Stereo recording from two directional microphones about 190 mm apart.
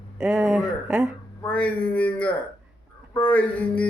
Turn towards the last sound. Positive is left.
turn(degrees=5)  # may be behind; listen again after turning